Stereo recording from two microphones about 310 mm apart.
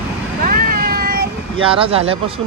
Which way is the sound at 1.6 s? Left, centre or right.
Centre.